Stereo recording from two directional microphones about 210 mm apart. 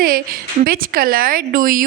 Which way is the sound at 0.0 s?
40° right (ahead or behind).